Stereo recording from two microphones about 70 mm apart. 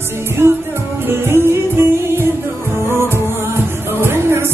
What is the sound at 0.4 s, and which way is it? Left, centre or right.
Music, right.